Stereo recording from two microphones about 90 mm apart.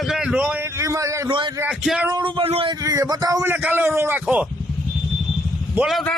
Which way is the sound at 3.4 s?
20° right (ahead or behind).